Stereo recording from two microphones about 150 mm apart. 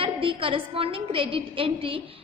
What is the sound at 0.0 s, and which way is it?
A woman's voice, 35° right (ahead or behind).